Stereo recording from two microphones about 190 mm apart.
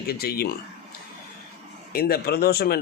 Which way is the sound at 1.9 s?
50° left (ahead or behind).